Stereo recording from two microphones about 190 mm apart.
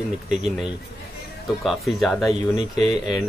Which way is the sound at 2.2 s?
20° left (ahead or behind).